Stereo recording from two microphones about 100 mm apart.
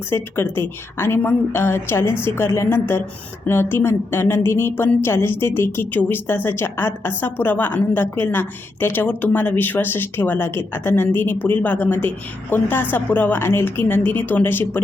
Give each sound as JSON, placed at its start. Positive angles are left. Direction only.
{"t": 0.1, "sound": "speech", "side_deg": 25}